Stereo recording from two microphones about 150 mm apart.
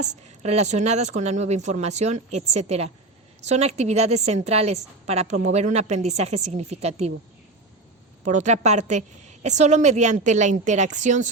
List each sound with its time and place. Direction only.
0.0 s a woman's voice: 45° right (ahead or behind)
8.2 s a woman's voice: 55° right (ahead or behind)